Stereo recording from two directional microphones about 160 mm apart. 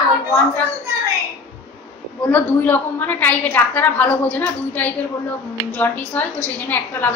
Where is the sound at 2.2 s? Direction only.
10° left (ahead or behind).